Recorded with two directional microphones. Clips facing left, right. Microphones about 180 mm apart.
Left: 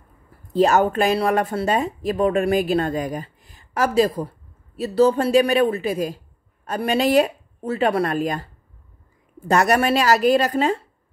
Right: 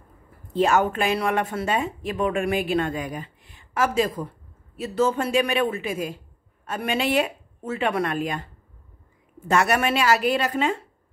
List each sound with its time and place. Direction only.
0.5 s a woman's voice: 40° left (ahead or behind)